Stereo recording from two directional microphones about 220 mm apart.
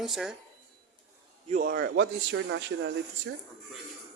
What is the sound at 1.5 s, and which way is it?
A man's voice, 40° right (ahead or behind).